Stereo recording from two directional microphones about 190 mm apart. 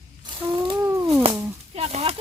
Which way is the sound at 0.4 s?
25° right (ahead or behind).